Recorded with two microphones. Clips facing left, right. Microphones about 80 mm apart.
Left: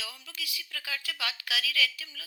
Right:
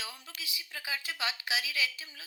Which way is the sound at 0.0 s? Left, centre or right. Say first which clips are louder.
Left 2 dB; right.